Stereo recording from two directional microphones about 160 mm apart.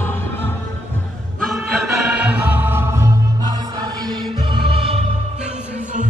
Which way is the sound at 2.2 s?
10° right (ahead or behind).